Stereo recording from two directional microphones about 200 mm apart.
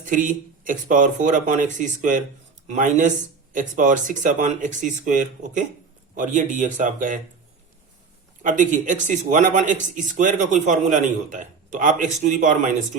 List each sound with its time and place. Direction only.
0.0 s speech: 40° right (ahead or behind)
8.4 s speech: 40° right (ahead or behind)